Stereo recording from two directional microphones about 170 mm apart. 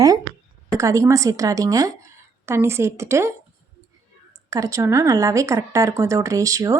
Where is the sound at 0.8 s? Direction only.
20° right (ahead or behind).